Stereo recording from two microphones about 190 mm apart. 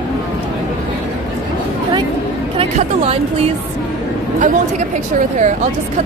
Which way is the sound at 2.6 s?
30° right (ahead or behind).